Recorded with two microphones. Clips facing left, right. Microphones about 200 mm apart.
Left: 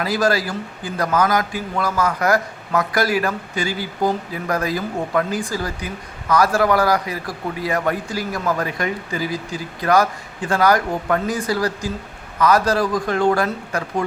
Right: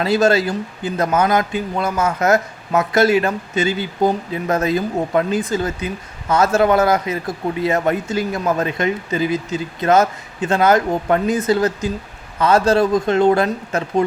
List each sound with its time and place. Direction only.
0.0 s a man's voice: 25° right (ahead or behind)